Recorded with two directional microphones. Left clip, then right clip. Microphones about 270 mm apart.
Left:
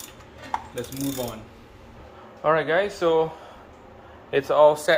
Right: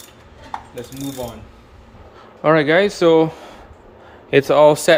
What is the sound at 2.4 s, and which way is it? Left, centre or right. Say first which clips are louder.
Speech: right 7 dB; right.